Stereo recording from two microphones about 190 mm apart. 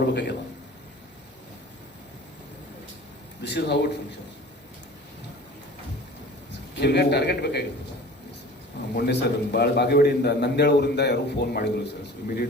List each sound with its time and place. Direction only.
0.0 s a man's voice: 60° left (ahead or behind)
3.4 s a man's voice: 65° left (ahead or behind)
6.7 s a man's voice: 60° left (ahead or behind)
9.0 s a man's voice: 60° left (ahead or behind)